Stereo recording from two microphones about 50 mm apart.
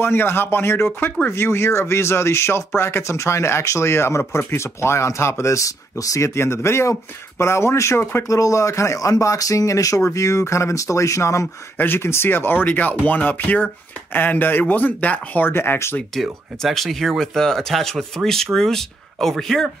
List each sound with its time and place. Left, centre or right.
0.0 s speech: left
3.9 s speech: left
6.3 s speech: left
8.2 s speech: left
11.8 s speech: left
12.6 s speech: left
15.4 s speech: left
16.2 s speech: centre